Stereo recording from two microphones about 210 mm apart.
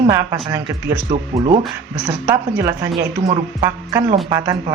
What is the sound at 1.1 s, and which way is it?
Speech, 30° right (ahead or behind).